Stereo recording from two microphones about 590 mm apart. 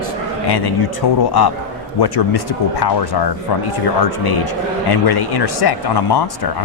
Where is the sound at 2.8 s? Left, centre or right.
Left.